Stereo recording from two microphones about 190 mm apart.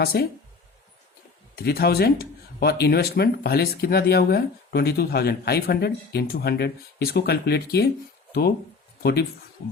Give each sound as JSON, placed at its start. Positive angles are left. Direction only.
{"t": 0.0, "sound": "speech", "side_deg": 55}
{"t": 1.5, "sound": "speech", "side_deg": 55}